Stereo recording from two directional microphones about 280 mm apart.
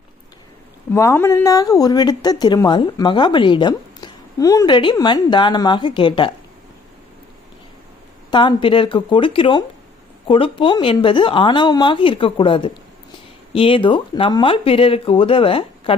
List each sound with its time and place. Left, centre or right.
0.9 s speech: centre
8.3 s speech: centre